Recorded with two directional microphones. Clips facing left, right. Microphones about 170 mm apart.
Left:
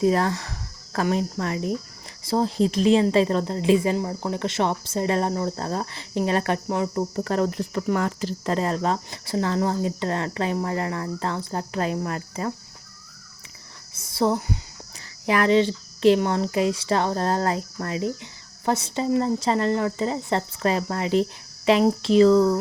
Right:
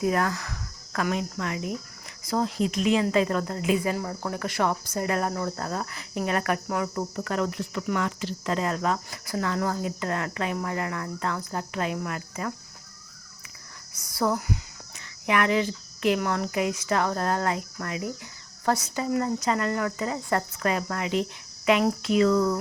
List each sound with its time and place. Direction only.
0.0 s speech: 30° left (ahead or behind)
13.9 s speech: 25° left (ahead or behind)